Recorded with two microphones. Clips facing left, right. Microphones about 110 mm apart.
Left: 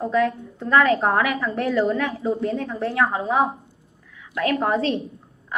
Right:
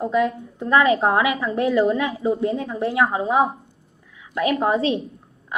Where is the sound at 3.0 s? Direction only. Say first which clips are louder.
Right 1 dB; 20° right (ahead or behind).